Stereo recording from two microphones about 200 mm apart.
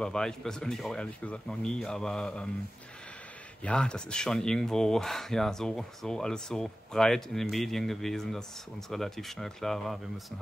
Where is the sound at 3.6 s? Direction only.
5° left (ahead or behind).